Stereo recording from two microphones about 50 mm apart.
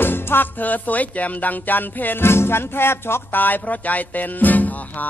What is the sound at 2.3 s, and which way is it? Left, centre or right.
Speech, left.